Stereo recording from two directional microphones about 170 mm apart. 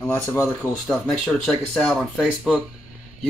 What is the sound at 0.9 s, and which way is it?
Speech, centre (ahead or behind).